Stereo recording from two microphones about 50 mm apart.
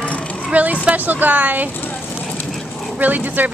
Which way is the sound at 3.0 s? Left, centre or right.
Right.